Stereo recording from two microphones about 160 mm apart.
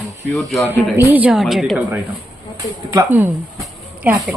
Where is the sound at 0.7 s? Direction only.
15° right (ahead or behind).